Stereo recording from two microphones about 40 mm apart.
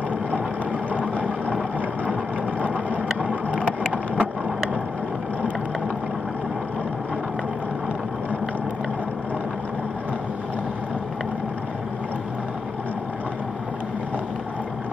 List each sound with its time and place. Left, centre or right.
3.2 s vehicle: right